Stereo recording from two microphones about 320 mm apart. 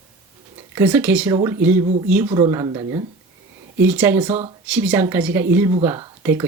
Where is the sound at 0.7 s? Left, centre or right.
Centre.